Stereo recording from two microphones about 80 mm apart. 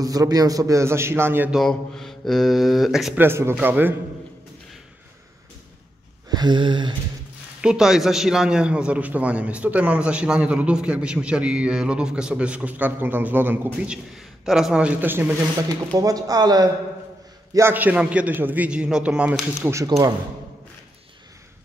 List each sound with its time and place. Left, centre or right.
0.0 s a man's voice: right
1.6 s speech: centre
3.2 s a man's voice: right
6.2 s a sound: right
7.6 s a man's voice: centre; by 13.6 s right
13.8 s a man's voice: centre; by 15.3 s right
15.9 s speech: right
17.6 s a man's voice: right